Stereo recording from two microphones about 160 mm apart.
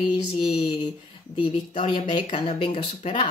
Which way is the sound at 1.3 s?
30° left (ahead or behind).